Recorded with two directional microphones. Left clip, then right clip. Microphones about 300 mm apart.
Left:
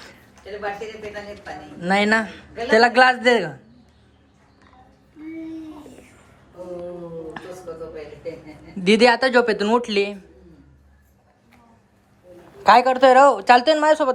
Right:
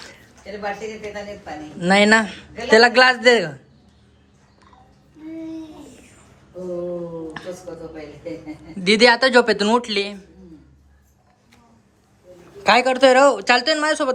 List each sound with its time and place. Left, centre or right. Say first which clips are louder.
1.8 s a man's voice: right 4 dB; centre
8.8 s a man's voice: right 1 dB; centre
12.6 s a man's voice: left 1 dB; centre